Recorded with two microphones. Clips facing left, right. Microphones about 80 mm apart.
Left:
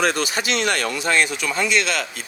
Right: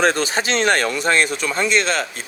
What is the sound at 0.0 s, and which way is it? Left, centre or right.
Speech, right.